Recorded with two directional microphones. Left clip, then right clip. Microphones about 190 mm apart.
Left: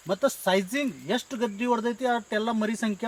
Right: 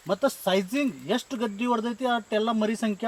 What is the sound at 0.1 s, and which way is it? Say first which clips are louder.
Speech: even; 20° left (ahead or behind).